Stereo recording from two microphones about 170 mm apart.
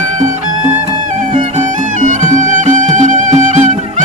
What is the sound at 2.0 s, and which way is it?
Music, 45° right (ahead or behind).